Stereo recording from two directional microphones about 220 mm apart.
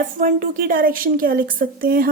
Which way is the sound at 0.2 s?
35° right (ahead or behind).